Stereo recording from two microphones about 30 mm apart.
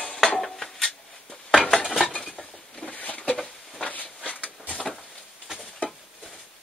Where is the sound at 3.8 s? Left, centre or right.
Left.